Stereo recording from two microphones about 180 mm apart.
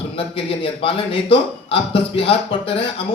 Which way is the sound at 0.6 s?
30° left (ahead or behind).